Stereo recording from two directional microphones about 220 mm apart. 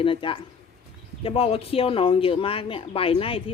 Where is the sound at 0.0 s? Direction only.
25° left (ahead or behind).